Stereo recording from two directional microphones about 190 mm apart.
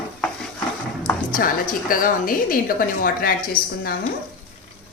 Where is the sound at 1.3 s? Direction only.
45° left (ahead or behind).